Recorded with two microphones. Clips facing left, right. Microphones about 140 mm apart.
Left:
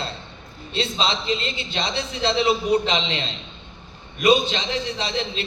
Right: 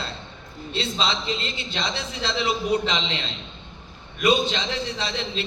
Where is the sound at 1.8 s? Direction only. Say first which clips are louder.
Left 3 dB; 25° left (ahead or behind).